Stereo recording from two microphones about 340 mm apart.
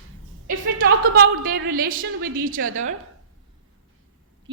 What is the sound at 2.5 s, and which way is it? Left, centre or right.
Speech, right.